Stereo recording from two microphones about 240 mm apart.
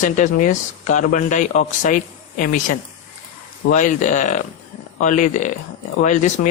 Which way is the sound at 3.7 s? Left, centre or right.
Left.